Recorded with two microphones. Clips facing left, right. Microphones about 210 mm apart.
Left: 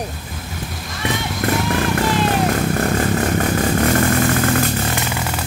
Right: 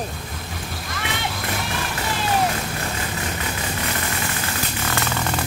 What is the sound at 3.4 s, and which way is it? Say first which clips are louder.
Vehicle: left 11 dB; 50° left (ahead or behind).